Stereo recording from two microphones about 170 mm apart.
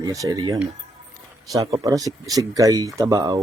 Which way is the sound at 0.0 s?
20° right (ahead or behind).